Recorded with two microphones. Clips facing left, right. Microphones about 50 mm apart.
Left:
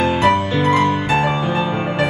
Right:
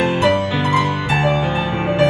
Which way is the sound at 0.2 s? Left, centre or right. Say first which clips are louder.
Left 1 dB; left.